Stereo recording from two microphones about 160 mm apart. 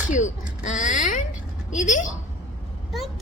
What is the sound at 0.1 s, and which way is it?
A woman's voice, 50° left (ahead or behind).